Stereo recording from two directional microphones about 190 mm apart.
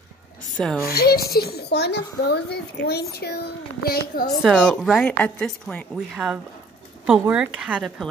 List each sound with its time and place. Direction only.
0.8 s a child's voice: 55° left (ahead or behind)
4.4 s a woman's voice: 5° left (ahead or behind)
6.1 s a woman's voice: 5° right (ahead or behind)